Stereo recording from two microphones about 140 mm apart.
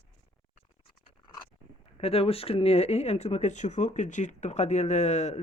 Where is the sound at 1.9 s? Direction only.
45° left (ahead or behind).